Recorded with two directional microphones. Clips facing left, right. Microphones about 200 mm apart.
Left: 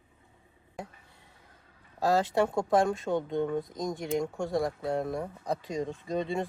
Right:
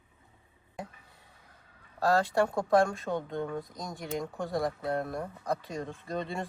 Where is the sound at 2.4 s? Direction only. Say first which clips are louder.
Even; 15° left (ahead or behind).